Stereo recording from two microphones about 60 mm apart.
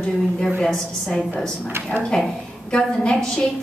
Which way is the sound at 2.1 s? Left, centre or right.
Centre.